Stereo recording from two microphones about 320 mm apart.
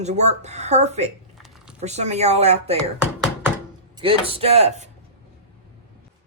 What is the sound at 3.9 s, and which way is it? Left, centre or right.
Speech, centre.